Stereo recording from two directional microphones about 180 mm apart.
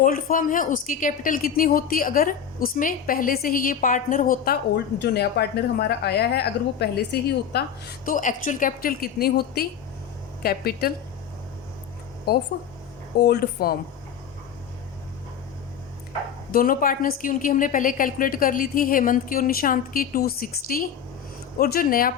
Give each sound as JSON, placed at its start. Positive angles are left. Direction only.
{"t": 0.0, "sound": "a woman's voice", "side_deg": 50}
{"t": 4.9, "sound": "speech", "side_deg": 65}
{"t": 13.1, "sound": "speech", "side_deg": 60}
{"t": 16.5, "sound": "a woman's voice", "side_deg": 50}